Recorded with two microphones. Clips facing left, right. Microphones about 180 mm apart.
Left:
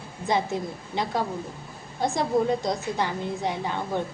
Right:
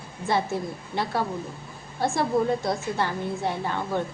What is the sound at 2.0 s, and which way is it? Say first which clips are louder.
A woman's voice: even; 20° left (ahead or behind).